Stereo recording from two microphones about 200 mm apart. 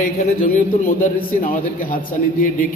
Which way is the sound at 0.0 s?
40° left (ahead or behind).